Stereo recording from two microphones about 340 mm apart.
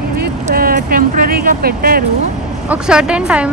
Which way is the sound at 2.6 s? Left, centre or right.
Centre.